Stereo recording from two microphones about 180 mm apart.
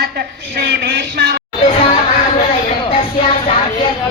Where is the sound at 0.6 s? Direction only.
65° right (ahead or behind).